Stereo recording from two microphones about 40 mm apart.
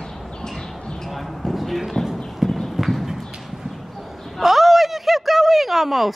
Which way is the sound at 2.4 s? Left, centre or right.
Centre.